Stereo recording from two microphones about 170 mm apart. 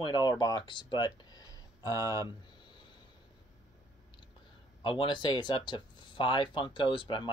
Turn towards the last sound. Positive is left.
turn(degrees=30)  # may be behind; listen again after turning